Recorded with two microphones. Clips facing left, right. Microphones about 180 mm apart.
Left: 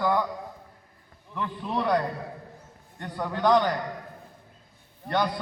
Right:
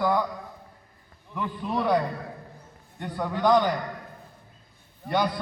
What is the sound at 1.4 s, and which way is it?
Speech, 5° right (ahead or behind).